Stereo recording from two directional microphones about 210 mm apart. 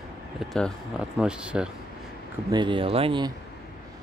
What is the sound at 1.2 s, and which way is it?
Speech, 5° right (ahead or behind).